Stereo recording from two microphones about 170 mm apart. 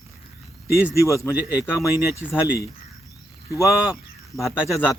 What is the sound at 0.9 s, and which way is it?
Speech, 15° left (ahead or behind).